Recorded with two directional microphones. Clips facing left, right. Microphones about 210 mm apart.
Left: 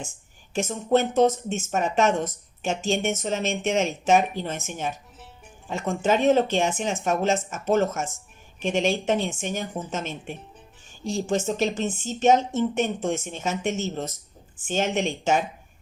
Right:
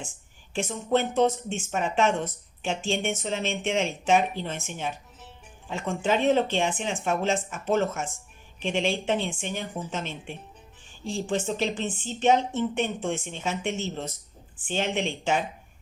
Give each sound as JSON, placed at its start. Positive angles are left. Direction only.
{"t": 0.5, "sound": "speech", "side_deg": 45}